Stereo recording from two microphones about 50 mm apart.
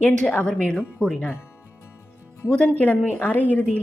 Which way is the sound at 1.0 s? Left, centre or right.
Left.